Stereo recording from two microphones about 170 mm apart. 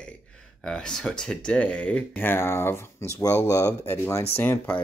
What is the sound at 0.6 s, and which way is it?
Speech, 5° left (ahead or behind).